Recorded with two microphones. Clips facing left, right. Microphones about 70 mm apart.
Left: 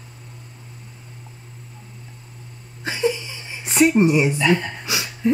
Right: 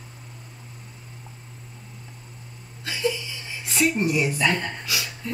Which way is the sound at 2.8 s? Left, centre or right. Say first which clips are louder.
Left 4 dB; left.